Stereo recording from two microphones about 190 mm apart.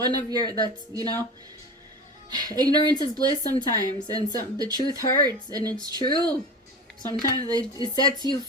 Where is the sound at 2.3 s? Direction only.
20° right (ahead or behind).